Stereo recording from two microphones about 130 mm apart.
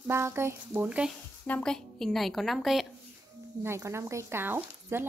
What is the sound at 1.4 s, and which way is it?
Speech, 10° left (ahead or behind).